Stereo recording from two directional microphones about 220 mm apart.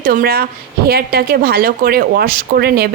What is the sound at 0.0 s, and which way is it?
Speech, 40° right (ahead or behind).